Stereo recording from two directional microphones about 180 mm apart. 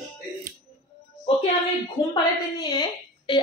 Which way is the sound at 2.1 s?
20° left (ahead or behind).